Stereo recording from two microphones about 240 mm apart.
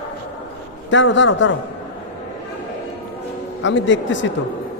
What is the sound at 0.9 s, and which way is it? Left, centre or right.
Speech, left.